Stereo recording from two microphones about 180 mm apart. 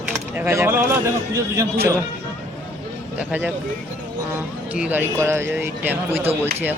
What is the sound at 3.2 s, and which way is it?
Speech, 10° right (ahead or behind).